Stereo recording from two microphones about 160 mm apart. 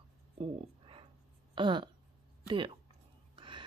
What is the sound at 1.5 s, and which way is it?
Speech, 30° right (ahead or behind).